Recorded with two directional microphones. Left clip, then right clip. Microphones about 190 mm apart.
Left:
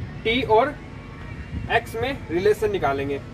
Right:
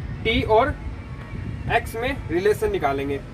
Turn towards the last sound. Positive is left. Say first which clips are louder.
# even
turn(degrees=-15)  # may be behind; listen again after turning